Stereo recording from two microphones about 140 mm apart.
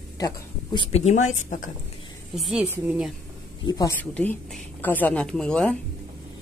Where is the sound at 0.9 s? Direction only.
55° left (ahead or behind).